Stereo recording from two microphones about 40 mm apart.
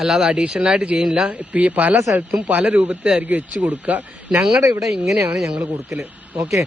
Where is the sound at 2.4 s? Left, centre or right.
Right.